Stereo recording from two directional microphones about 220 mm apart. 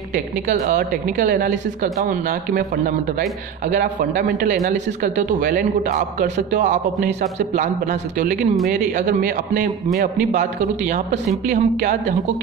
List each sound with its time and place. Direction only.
0.1 s a woman's voice: 35° right (ahead or behind)